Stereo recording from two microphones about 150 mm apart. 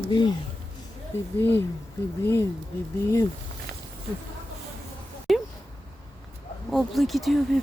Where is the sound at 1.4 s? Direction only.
15° left (ahead or behind).